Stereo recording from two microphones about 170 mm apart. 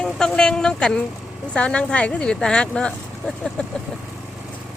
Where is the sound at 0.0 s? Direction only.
5° left (ahead or behind).